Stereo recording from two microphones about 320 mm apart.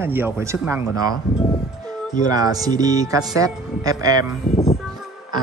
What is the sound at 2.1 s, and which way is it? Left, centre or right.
Speech, centre.